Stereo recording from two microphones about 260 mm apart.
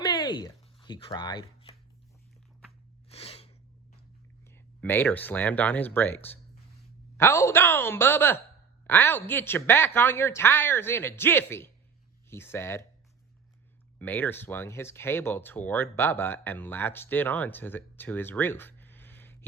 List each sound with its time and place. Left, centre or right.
0.0 s a sound: centre
3.1 s sneeze: left
4.5 s speech: centre
14.0 s speech: centre